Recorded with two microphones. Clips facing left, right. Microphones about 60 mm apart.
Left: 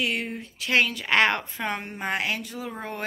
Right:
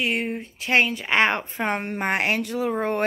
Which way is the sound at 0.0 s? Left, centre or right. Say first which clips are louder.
Right 3 dB; right.